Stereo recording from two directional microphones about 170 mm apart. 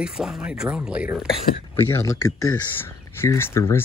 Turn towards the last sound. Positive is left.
turn(degrees=15)  # may be behind; listen again after turning